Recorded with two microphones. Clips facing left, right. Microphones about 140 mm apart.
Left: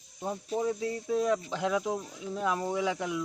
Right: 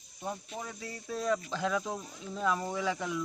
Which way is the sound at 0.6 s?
20° left (ahead or behind).